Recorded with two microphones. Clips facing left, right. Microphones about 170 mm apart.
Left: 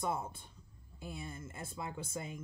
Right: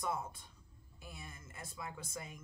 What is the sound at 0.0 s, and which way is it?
Speech, 30° left (ahead or behind).